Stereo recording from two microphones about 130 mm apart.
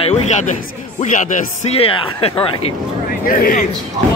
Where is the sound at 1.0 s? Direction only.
80° left.